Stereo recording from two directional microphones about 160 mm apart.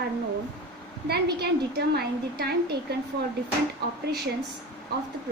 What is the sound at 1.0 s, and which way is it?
A woman's voice, 85° right.